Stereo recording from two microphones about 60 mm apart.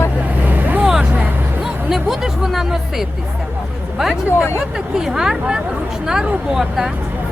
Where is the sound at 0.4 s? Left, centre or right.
Right.